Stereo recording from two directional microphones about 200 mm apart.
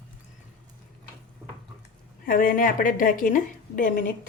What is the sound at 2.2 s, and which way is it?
A woman's voice, 45° left (ahead or behind).